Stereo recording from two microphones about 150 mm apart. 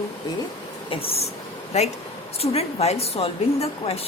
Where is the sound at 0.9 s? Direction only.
40° left (ahead or behind).